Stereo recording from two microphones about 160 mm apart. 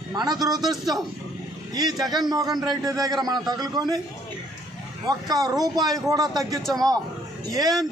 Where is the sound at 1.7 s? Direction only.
25° right (ahead or behind).